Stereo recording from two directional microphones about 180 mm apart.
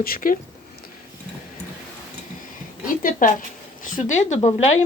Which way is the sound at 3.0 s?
50° left (ahead or behind).